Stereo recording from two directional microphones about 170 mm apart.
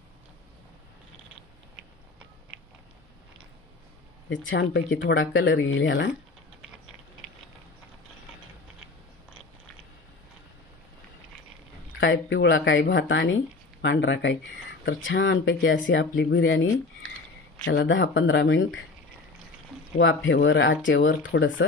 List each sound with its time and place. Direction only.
4.5 s speech: 90° left
12.0 s speech: 90° left
17.6 s speech: 90° left
20.2 s speech: 90° left